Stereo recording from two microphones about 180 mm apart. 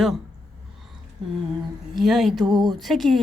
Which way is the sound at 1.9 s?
Centre (ahead or behind).